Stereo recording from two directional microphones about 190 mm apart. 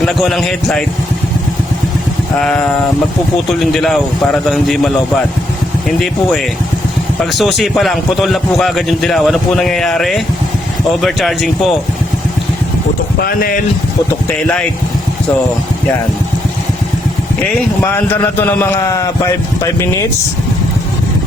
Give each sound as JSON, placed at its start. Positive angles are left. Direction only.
{"t": 0.0, "sound": "a man's voice", "side_deg": 0}
{"t": 2.4, "sound": "a man's voice", "side_deg": 5}
{"t": 7.2, "sound": "a man's voice", "side_deg": 0}
{"t": 13.1, "sound": "speech", "side_deg": 50}
{"t": 17.8, "sound": "a man's voice", "side_deg": 10}